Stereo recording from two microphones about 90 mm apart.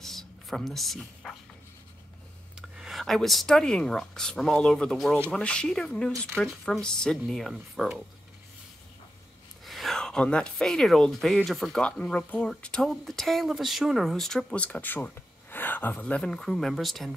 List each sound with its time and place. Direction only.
0.0 s a sound: 5° left (ahead or behind)
2.8 s speech: centre (ahead or behind)
9.7 s speech: centre (ahead or behind)
11.8 s speech: 15° left (ahead or behind)